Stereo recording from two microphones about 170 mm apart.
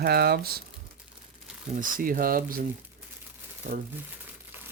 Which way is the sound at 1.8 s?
55° right (ahead or behind).